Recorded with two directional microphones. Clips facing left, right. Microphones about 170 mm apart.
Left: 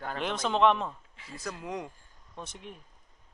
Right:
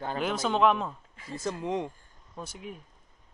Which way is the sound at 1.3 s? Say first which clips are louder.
Right 6 dB; 25° right (ahead or behind).